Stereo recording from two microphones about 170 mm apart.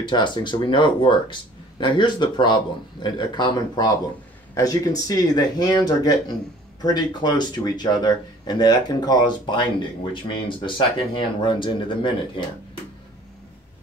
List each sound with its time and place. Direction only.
0.0 s speech: 25° left (ahead or behind)